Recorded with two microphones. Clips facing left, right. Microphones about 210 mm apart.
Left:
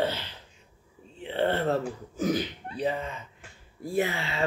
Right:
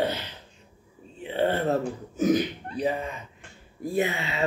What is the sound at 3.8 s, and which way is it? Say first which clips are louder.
Speech: right 2 dB; 20° right (ahead or behind).